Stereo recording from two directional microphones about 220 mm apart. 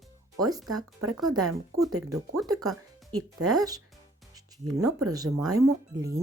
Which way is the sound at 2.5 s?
15° right (ahead or behind).